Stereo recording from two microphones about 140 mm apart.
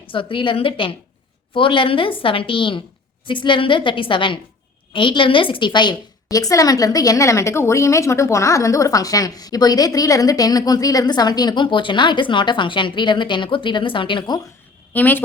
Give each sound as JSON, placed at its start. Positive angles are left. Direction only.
{"t": 0.1, "sound": "a woman's voice", "side_deg": 40}
{"t": 14.9, "sound": "a woman's voice", "side_deg": 10}